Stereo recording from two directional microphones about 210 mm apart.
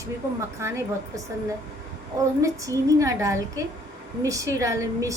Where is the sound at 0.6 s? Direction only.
15° right (ahead or behind).